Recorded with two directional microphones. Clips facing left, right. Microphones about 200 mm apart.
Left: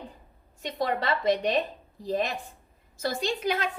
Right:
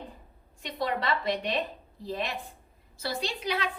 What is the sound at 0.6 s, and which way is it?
A woman's voice, 45° left (ahead or behind).